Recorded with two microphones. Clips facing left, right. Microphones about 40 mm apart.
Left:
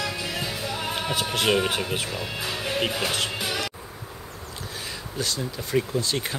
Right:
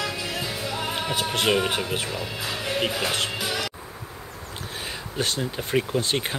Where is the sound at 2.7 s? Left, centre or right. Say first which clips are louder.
Right 1 dB; centre.